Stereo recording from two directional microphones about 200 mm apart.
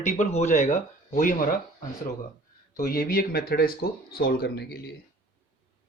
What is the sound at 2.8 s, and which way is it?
Speech, 45° left (ahead or behind).